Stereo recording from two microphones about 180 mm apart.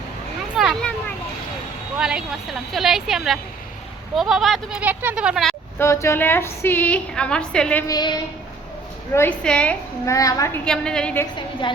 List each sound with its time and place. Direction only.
0.5 s a sound: centre (ahead or behind)
2.0 s speech: 5° right (ahead or behind)
5.8 s a woman's voice: 15° left (ahead or behind)
7.9 s a woman's voice: 20° left (ahead or behind)
9.1 s a woman's voice: 10° left (ahead or behind)
10.2 s a woman's voice: 20° left (ahead or behind)
10.7 s speech: 5° left (ahead or behind)
11.6 s a woman's voice: 25° left (ahead or behind)